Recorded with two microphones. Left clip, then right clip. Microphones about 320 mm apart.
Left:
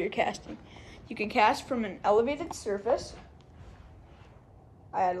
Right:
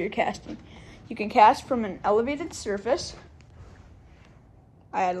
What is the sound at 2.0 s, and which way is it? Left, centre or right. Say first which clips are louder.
A woman's voice: even; right.